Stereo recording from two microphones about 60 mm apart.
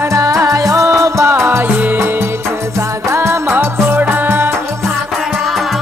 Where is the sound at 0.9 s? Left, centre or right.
Right.